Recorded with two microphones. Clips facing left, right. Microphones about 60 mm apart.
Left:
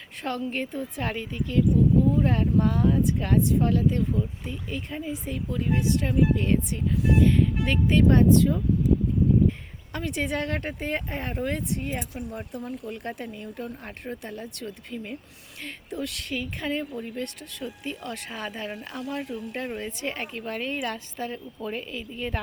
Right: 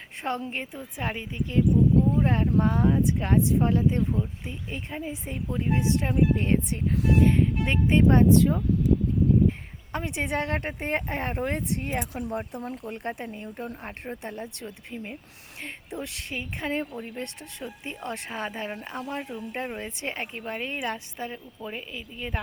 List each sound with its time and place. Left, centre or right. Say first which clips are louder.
0.2 s a woman's voice: right 1 dB; right
0.5 s speech: left 4 dB; centre
9.9 s speech: even; right
11.8 s speech: right 2 dB; right
19.2 s speech: left 1 dB; centre